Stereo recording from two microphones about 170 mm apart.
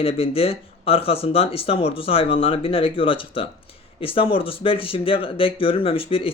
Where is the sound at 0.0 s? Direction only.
35° left (ahead or behind).